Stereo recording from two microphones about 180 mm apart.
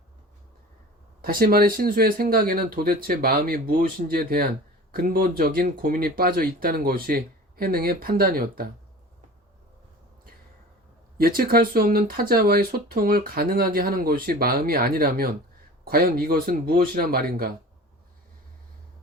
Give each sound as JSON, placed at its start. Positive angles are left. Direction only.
{"t": 1.2, "sound": "speech", "side_deg": -55}
{"t": 11.2, "sound": "speech", "side_deg": -55}